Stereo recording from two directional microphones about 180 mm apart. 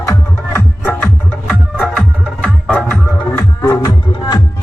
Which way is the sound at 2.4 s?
5° left (ahead or behind).